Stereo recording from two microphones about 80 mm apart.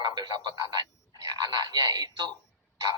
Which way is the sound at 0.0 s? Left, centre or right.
Right.